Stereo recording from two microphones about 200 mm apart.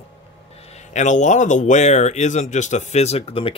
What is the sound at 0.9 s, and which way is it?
Speech, 35° left (ahead or behind).